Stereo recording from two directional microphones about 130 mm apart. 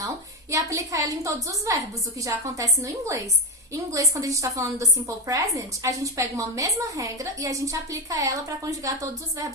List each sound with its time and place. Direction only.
0.5 s a woman's voice: 25° right (ahead or behind)